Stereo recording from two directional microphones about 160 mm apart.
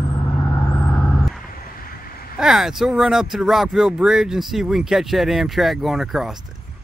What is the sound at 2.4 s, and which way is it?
Speech, 5° right (ahead or behind).